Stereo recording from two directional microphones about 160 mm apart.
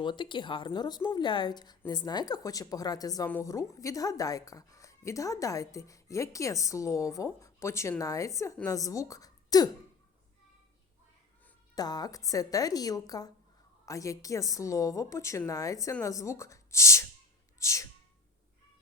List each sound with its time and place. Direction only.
0.0 s speech: 30° left (ahead or behind)
11.7 s speech: 25° left (ahead or behind)
17.6 s a sound: 20° left (ahead or behind)